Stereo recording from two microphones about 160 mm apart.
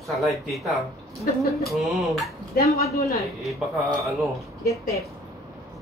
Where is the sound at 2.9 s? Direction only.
20° left (ahead or behind).